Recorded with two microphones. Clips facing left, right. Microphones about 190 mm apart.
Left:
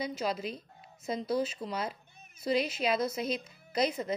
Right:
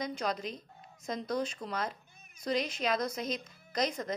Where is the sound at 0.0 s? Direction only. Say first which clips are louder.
Left 1 dB; 5° left (ahead or behind).